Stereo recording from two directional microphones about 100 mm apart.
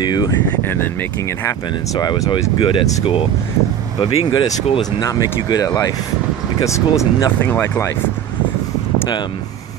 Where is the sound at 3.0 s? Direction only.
65° left (ahead or behind).